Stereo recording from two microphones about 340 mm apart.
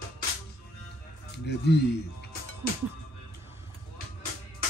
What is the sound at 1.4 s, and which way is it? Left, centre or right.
Speech, left.